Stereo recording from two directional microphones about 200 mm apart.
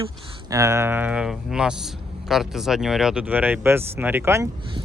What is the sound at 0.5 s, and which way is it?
Speech, 15° right (ahead or behind).